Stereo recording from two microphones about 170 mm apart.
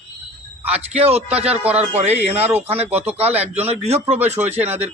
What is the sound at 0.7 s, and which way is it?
Speech, 35° right (ahead or behind).